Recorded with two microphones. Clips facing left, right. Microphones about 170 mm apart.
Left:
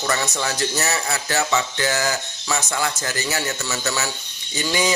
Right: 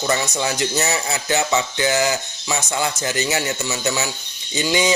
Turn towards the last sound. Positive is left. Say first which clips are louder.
# right 3 dB
turn(degrees=-20)  # may be behind; listen again after turning